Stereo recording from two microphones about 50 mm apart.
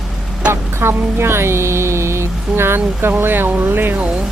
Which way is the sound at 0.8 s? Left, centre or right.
Right.